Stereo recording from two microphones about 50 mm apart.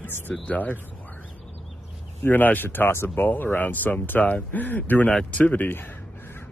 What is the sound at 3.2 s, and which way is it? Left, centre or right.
Speech, left.